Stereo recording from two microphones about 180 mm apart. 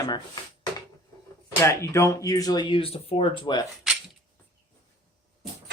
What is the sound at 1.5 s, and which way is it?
Speech, 15° left (ahead or behind).